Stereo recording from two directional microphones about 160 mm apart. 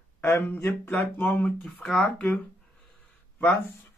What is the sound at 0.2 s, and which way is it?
Speech, 15° left (ahead or behind).